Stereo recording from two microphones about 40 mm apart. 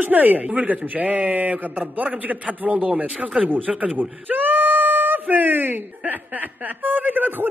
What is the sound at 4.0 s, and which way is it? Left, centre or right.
Speech, right.